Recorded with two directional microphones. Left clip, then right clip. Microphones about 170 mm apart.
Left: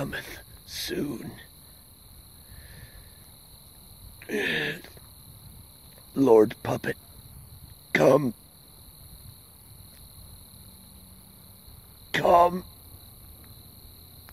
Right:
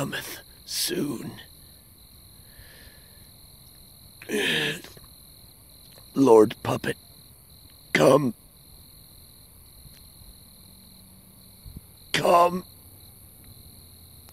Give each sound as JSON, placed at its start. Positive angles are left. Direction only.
{"t": 0.0, "sound": "speech", "side_deg": -30}
{"t": 4.2, "sound": "speech", "side_deg": -30}
{"t": 6.1, "sound": "speech", "side_deg": -25}
{"t": 12.1, "sound": "speech", "side_deg": -15}